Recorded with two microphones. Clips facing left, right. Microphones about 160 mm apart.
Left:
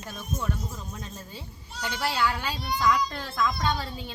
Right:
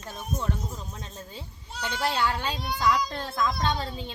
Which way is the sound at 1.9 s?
20° right (ahead or behind).